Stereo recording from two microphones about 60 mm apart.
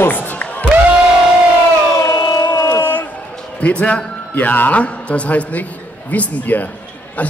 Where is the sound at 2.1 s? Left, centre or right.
Left.